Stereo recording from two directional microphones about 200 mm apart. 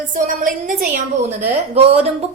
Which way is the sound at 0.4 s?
40° right (ahead or behind).